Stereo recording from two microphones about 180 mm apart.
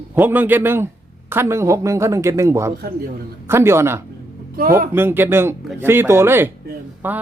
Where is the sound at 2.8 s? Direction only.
55° right (ahead or behind).